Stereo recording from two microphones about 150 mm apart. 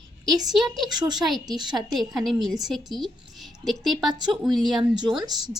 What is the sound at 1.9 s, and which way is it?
A woman's voice, centre (ahead or behind).